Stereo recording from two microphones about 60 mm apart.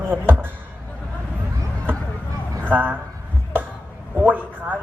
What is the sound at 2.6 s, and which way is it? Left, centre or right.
Speech, right.